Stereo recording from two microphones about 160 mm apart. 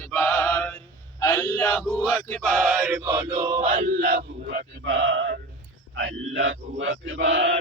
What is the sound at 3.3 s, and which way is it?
Male singing, 40° right (ahead or behind).